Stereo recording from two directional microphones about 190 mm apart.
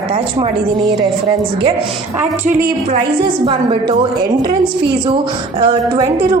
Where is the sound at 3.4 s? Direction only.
25° right (ahead or behind).